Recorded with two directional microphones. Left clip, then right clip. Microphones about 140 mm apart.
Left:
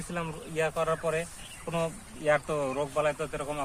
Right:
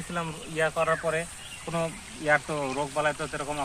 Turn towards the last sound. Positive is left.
turn(degrees=30)  # may be behind; listen again after turning